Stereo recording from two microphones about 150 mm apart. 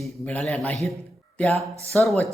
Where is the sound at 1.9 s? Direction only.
10° left (ahead or behind).